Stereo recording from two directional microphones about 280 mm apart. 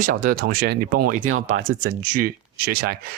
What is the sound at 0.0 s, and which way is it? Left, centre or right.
Speech, right.